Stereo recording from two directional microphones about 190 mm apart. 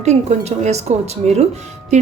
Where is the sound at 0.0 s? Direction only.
35° right (ahead or behind).